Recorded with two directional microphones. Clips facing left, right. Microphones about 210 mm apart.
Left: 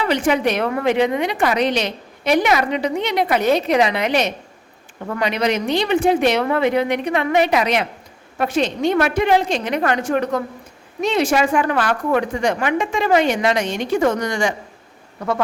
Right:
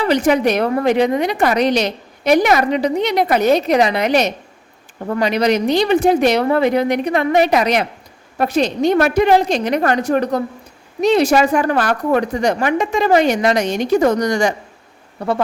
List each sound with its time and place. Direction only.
0.0 s a woman's voice: 40° right (ahead or behind)